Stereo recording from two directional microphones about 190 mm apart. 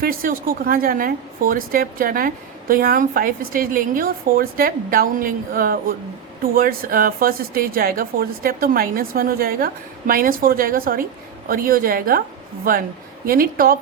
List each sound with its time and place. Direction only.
0.0 s a woman's voice: 50° right (ahead or behind)